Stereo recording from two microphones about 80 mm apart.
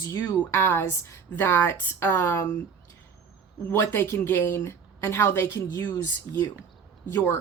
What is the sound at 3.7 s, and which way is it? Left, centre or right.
Speech, left.